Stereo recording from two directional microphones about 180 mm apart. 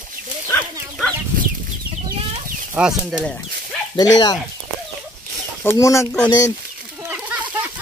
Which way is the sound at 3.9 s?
20° left (ahead or behind).